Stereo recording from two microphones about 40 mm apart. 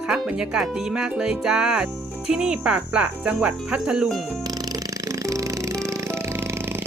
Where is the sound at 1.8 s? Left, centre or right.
Right.